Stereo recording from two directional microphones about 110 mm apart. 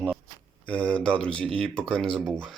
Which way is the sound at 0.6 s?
10° left (ahead or behind).